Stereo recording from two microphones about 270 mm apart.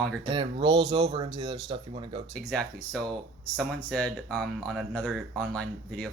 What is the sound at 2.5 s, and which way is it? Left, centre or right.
Speech, centre.